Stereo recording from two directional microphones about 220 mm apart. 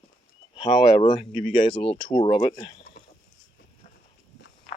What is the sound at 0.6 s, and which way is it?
Speech, 20° left (ahead or behind).